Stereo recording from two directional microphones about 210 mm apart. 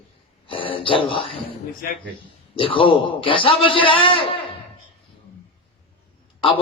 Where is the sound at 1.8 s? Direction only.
45° left (ahead or behind).